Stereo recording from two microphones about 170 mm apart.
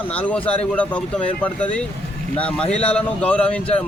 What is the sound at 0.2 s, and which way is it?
Speech, 10° left (ahead or behind).